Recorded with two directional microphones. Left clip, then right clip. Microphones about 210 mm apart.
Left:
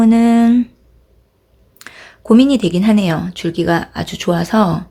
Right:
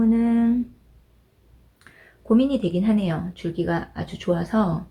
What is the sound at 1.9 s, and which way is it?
Speech, 45° left (ahead or behind).